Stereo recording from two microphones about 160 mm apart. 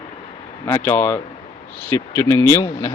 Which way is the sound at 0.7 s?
15° left (ahead or behind).